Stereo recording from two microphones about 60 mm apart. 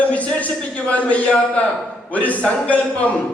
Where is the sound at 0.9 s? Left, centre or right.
Left.